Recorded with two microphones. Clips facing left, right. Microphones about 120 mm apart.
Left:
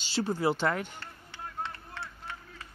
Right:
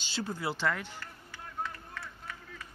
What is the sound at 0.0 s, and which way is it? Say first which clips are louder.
Speech: left 7 dB; 30° left (ahead or behind).